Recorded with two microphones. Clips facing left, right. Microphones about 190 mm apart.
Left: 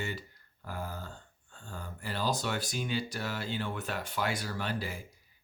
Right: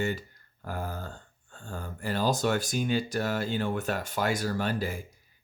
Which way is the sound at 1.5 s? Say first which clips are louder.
Right 5 dB; 50° right (ahead or behind).